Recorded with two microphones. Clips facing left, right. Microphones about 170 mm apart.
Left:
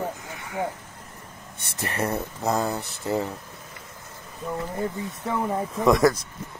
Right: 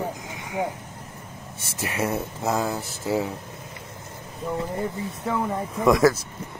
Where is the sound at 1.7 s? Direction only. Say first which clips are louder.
Right 1 dB; centre (ahead or behind).